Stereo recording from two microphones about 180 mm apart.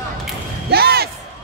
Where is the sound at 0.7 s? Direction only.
60° right (ahead or behind).